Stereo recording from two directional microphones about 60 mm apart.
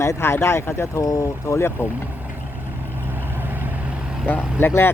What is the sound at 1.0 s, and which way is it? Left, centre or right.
Speech, left.